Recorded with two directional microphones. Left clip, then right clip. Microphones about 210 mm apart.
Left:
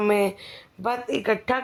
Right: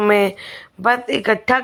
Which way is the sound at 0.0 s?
15° right (ahead or behind).